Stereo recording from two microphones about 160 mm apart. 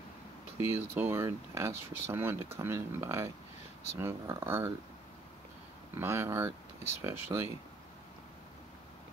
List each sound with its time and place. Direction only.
0.6 s speech: 15° right (ahead or behind)
5.9 s speech: 15° right (ahead or behind)